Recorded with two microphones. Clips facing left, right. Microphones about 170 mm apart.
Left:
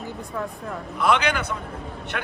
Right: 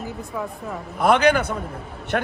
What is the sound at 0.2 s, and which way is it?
Speech, 5° right (ahead or behind).